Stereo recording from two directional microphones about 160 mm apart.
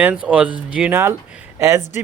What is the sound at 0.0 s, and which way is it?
Speech, 10° right (ahead or behind).